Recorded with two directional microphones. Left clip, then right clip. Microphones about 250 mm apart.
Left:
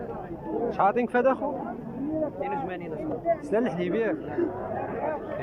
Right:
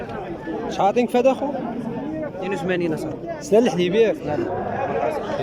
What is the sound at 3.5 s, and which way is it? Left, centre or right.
Speech, centre.